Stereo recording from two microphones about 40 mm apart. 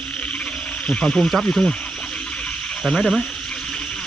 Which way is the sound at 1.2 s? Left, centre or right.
Centre.